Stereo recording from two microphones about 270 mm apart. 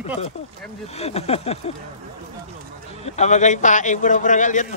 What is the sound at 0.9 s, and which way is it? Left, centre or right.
Speech, left.